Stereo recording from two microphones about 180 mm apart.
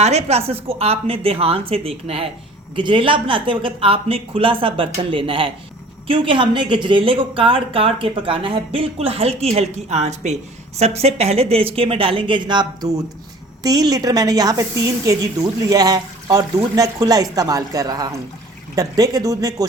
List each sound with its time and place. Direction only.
0.0 s speech: 35° right (ahead or behind); by 19.6 s 20° right (ahead or behind)